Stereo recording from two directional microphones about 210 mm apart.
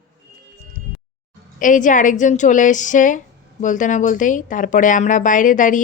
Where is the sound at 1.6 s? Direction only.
40° left (ahead or behind).